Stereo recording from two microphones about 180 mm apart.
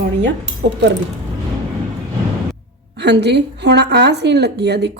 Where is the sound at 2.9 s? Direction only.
70° right (ahead or behind).